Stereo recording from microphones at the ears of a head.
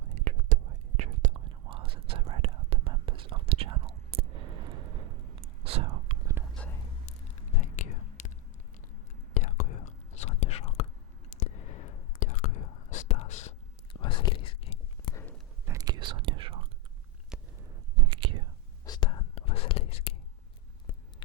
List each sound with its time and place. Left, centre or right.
0.0 s whispering: right
7.5 s whispering: left
9.3 s whispering: left
15.6 s whispering: right
18.9 s whispering: left